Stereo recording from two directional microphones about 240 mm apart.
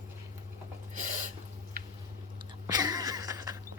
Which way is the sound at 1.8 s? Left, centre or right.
Right.